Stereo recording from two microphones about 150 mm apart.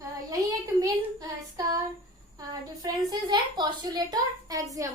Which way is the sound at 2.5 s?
25° right (ahead or behind).